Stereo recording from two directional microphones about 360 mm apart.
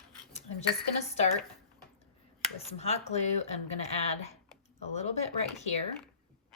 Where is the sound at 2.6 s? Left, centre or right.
Centre.